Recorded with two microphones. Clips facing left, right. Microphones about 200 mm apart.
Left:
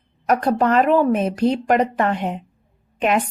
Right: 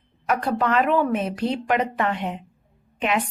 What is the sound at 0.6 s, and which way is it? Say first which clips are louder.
Speech: left 4 dB; 40° left (ahead or behind).